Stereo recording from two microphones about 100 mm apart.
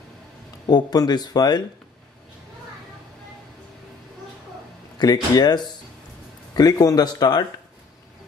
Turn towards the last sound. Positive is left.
turn(degrees=40)  # may be behind; listen again after turning